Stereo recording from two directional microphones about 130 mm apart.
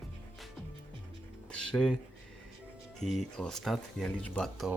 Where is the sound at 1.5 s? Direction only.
5° left (ahead or behind).